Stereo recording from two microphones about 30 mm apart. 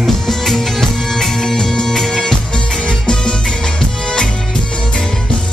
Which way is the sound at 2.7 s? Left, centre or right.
Left.